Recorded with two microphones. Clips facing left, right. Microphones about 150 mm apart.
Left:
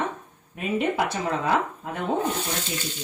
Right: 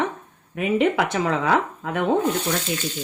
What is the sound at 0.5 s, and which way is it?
Speech, 80° right.